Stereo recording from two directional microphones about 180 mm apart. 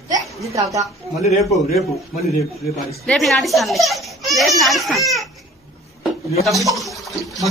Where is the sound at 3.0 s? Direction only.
Centre (ahead or behind).